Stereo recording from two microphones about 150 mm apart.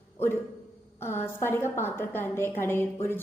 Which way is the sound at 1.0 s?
15° left (ahead or behind).